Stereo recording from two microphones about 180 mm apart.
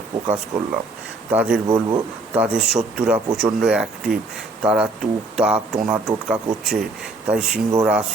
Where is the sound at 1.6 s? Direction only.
20° right (ahead or behind).